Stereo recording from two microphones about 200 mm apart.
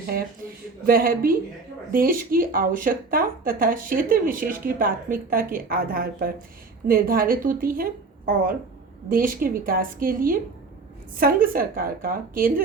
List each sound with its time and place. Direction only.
0.0 s speech: 45° right (ahead or behind)
9.0 s speech: 45° right (ahead or behind)